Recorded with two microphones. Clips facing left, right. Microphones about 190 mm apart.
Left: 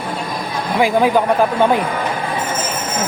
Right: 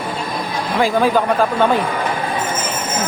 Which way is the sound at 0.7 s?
15° left (ahead or behind).